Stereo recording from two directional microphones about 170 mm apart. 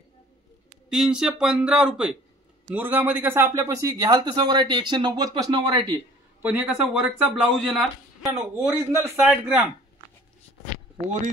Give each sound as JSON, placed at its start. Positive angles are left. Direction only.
{"t": 0.8, "sound": "speech", "side_deg": -5}
{"t": 6.4, "sound": "speech", "side_deg": -5}
{"t": 8.4, "sound": "a man's voice", "side_deg": -15}